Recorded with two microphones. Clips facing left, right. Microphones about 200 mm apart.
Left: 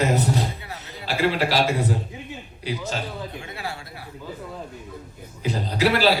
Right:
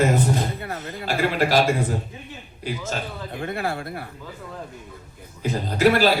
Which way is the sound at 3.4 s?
55° right (ahead or behind).